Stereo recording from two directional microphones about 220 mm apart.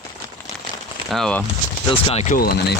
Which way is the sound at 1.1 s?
5° left (ahead or behind).